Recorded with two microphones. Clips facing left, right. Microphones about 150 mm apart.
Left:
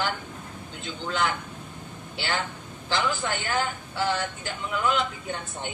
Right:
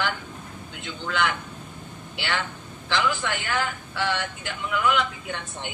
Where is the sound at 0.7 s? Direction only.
35° left (ahead or behind).